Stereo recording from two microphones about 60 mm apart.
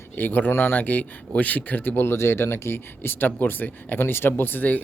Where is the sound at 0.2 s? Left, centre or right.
Left.